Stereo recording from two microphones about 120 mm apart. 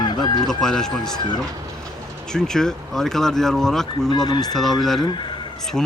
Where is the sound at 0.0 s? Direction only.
35° left (ahead or behind).